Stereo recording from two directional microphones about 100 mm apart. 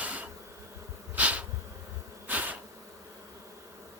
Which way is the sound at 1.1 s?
15° right (ahead or behind).